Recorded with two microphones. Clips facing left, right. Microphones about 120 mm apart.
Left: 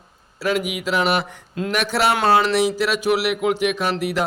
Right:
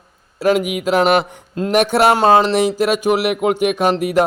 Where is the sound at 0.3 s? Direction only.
50° right (ahead or behind).